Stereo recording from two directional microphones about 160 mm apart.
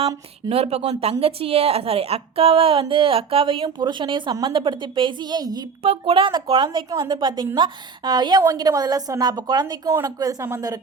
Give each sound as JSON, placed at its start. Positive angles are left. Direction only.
{"t": 0.4, "sound": "a woman's voice", "side_deg": -40}
{"t": 5.8, "sound": "a woman's voice", "side_deg": -40}